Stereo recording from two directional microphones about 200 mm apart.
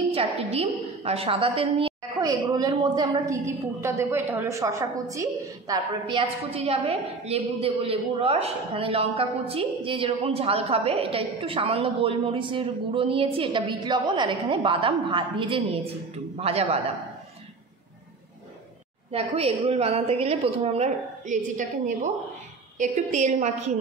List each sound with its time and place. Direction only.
0.1 s a woman's voice: 30° right (ahead or behind)
19.1 s a woman's voice: 30° right (ahead or behind)